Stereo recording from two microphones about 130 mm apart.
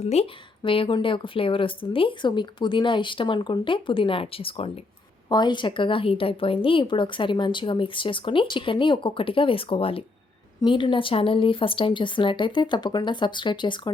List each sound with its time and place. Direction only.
0.0 s a woman's voice: 55° left (ahead or behind); by 13.9 s 35° left (ahead or behind)